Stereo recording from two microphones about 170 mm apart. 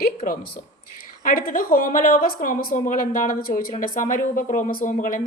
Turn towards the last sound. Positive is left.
turn(degrees=50)  # may be behind; listen again after turning